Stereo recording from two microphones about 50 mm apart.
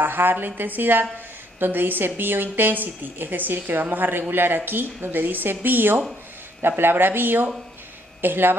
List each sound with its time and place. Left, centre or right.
0.0 s a woman's voice: right